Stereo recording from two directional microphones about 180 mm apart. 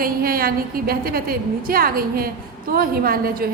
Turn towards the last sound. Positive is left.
turn(degrees=-55)  # may be behind; listen again after turning